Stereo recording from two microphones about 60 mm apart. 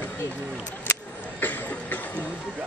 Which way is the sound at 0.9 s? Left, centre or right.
Left.